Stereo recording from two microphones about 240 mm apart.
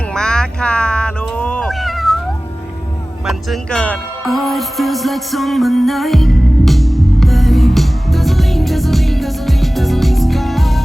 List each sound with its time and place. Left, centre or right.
0.1 s cat: centre
3.2 s music: centre